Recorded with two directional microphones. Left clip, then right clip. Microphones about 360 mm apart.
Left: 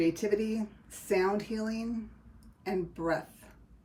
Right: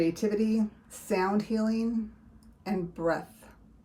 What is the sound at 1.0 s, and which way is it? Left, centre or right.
Speech, centre.